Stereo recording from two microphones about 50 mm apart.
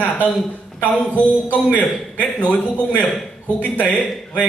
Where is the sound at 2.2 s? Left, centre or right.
Left.